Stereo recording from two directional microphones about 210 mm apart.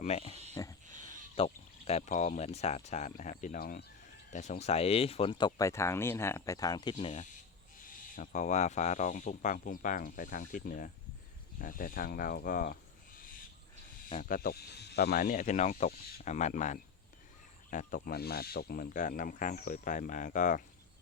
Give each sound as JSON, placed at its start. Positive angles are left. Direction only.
{"t": 0.0, "sound": "speech", "side_deg": 30}
{"t": 0.6, "sound": "pig", "side_deg": 15}
{"t": 1.4, "sound": "speech", "side_deg": 30}
{"t": 7.0, "sound": "speech", "side_deg": 35}
{"t": 14.1, "sound": "speech", "side_deg": 40}